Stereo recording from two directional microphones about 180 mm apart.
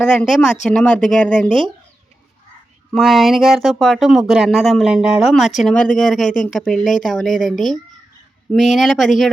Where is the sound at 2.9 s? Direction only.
Centre (ahead or behind).